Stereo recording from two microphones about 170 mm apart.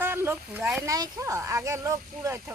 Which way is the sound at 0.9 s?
20° right (ahead or behind).